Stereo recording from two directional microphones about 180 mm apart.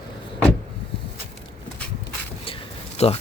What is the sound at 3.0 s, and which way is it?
Speech, 35° left (ahead or behind).